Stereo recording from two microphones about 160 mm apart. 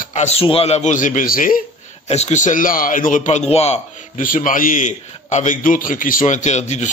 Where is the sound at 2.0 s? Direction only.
40° left (ahead or behind).